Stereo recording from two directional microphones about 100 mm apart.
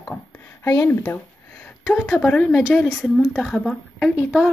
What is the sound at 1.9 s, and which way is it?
A woman's voice, 10° left (ahead or behind).